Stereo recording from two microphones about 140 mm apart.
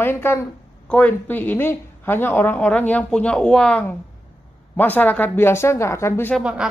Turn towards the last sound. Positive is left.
turn(degrees=-5)  # may be behind; listen again after turning